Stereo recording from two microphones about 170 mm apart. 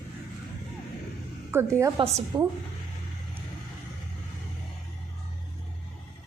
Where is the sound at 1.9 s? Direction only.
35° right (ahead or behind).